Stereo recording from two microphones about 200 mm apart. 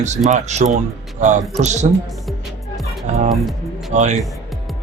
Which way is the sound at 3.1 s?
35° right (ahead or behind).